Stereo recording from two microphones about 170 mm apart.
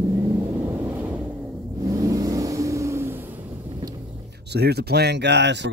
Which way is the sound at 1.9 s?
20° right (ahead or behind).